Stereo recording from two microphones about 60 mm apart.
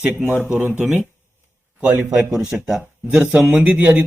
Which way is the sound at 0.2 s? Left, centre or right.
Right.